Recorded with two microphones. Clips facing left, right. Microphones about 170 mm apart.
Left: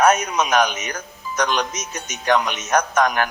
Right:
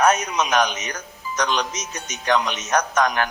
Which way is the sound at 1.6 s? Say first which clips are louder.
Left 2 dB; 50° left (ahead or behind).